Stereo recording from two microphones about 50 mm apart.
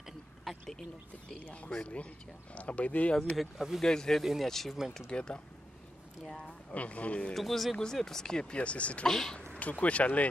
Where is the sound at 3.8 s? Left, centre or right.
Centre.